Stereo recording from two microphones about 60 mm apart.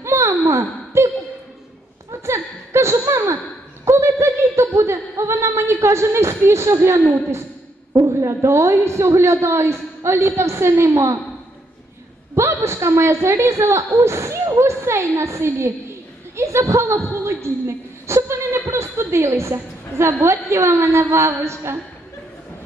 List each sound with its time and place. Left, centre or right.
0.0 s a sound: right
2.2 s a sound: right
8.1 s a woman's voice: right
12.4 s a woman's voice: right
15.4 s a woman's voice: right
16.3 s a woman's voice: right